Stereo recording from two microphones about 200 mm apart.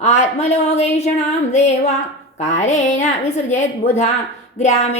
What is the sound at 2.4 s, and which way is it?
Speech, 35° left (ahead or behind).